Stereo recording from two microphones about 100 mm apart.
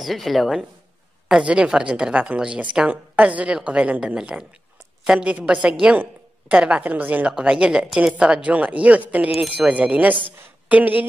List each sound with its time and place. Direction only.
0.0 s a woman's voice: centre (ahead or behind); by 11.1 s 15° right (ahead or behind)